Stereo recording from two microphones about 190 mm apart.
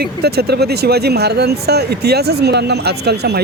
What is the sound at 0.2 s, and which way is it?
Speech, 55° right (ahead or behind).